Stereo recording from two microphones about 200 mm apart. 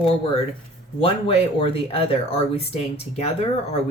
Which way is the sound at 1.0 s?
30° left (ahead or behind).